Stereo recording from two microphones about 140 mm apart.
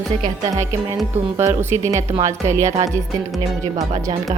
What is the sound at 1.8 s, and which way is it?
A woman's voice, 20° right (ahead or behind).